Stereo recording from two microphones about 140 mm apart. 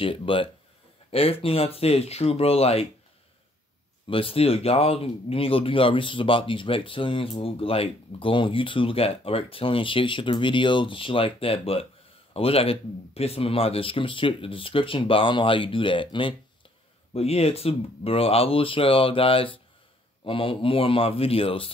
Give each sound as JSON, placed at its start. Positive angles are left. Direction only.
{"t": 0.0, "sound": "speech", "side_deg": 40}
{"t": 4.1, "sound": "speech", "side_deg": 40}